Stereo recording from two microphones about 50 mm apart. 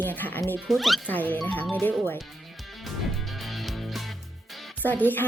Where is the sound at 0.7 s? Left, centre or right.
Centre.